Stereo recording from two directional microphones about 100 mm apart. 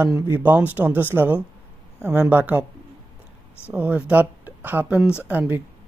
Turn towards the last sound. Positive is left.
turn(degrees=-15)  # may be behind; listen again after turning